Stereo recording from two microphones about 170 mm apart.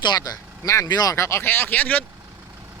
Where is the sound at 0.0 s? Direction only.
25° left (ahead or behind).